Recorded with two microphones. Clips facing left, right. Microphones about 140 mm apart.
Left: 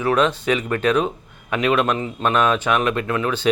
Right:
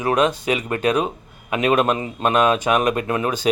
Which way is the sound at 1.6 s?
40° right (ahead or behind).